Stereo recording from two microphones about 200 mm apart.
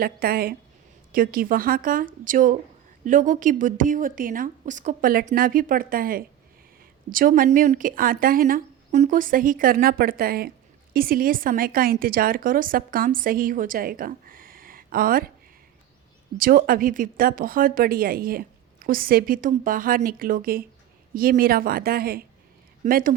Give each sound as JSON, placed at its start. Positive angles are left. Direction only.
{"t": 0.0, "sound": "a woman's voice", "side_deg": -50}
{"t": 16.4, "sound": "a woman's voice", "side_deg": -45}